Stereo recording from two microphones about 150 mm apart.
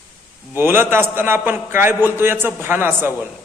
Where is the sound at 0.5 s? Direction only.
15° right (ahead or behind).